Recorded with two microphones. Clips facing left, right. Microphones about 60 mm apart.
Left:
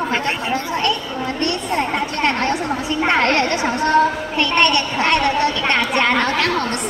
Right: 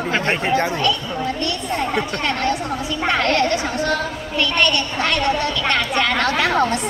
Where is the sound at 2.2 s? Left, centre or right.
Left.